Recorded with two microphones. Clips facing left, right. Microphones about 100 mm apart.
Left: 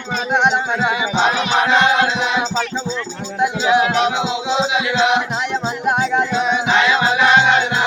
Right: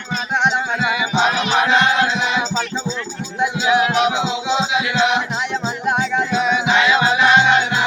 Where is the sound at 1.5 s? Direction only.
25° left (ahead or behind).